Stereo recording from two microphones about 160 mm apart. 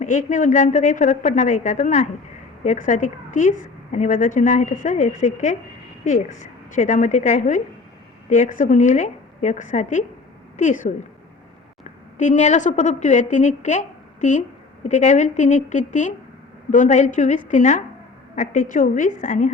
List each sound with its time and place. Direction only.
0.0 s a woman's voice: 50° left (ahead or behind)
12.1 s a woman's voice: 50° left (ahead or behind)